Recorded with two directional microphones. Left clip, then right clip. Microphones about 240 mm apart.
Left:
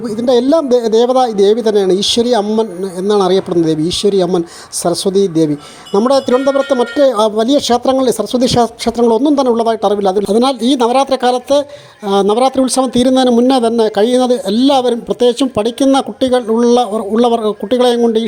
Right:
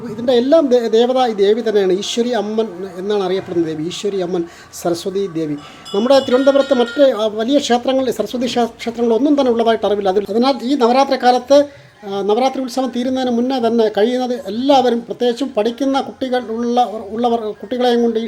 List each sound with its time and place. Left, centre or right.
0.2 s a man's voice: left